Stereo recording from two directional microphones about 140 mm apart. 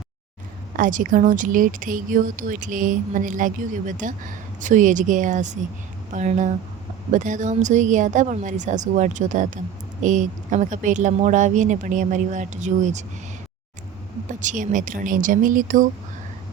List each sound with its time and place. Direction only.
0.8 s a woman's voice: 70° right (ahead or behind)
14.4 s speech: 65° right (ahead or behind)